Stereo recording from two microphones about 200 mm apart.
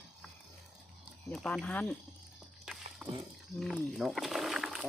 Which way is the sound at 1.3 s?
5° left (ahead or behind).